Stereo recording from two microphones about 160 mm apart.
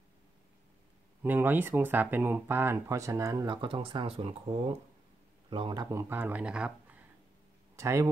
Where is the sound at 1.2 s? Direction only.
10° right (ahead or behind).